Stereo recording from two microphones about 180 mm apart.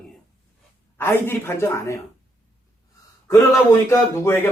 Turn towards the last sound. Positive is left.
turn(degrees=15)  # may be behind; listen again after turning